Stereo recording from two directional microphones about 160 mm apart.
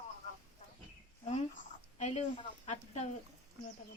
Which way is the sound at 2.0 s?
45° left (ahead or behind).